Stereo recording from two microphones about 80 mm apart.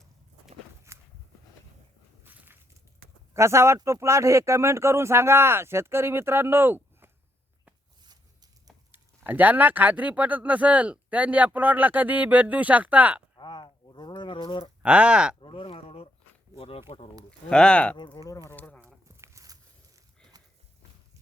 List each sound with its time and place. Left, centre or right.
0.9 s walk: right
2.2 s walk: right
3.3 s speech: right
8.0 s a sound: right
8.9 s speech: right
13.3 s a sound: left
14.2 s livestock: left
14.8 s speech: centre
15.4 s a sound: left
17.5 s speech: centre
17.9 s speech: left
18.2 s speech: left
18.5 s speech: left
19.0 s a sound: right